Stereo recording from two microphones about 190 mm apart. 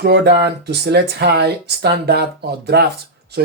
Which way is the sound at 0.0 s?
60° right (ahead or behind).